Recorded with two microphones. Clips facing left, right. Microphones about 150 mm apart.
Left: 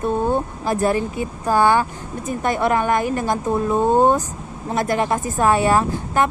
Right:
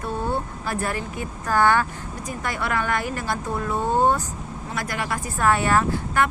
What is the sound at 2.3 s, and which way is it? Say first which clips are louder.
Speech: left 8 dB; 25° left (ahead or behind).